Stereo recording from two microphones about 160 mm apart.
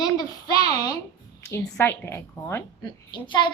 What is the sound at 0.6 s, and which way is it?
A woman's voice, 20° left (ahead or behind).